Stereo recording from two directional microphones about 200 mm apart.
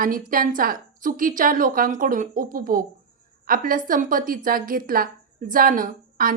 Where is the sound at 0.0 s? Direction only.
45° right (ahead or behind).